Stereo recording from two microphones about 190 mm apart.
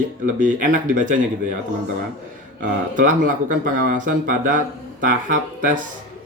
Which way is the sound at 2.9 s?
45° right (ahead or behind).